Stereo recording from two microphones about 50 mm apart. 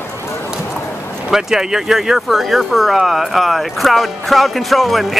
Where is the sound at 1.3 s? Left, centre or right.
Centre.